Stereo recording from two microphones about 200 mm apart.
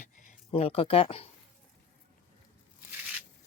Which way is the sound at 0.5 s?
30° left (ahead or behind).